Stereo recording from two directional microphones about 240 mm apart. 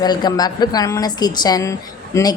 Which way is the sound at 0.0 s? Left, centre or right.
Centre.